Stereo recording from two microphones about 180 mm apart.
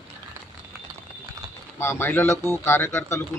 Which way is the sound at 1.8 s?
10° left (ahead or behind).